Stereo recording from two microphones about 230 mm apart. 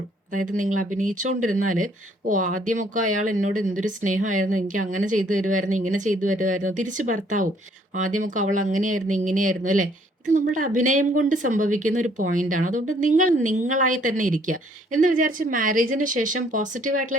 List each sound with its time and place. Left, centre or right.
0.3 s a woman's voice: right